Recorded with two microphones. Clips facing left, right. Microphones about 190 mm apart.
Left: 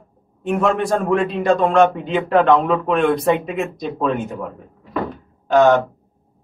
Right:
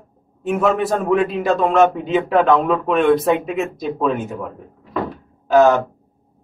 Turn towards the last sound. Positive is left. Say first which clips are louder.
# even
turn(degrees=0)  # may be behind; listen again after turning